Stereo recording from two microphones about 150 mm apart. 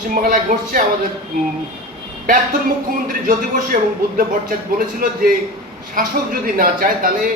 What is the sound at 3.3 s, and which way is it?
A man's voice, 65° right (ahead or behind).